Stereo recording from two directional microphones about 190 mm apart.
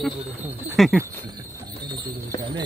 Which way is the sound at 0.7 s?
Centre (ahead or behind).